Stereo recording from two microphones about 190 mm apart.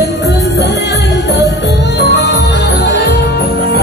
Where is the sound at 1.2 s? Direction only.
65° left (ahead or behind).